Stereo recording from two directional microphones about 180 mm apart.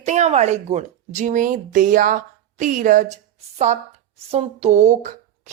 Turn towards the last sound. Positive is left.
turn(degrees=-45)  # may be behind; listen again after turning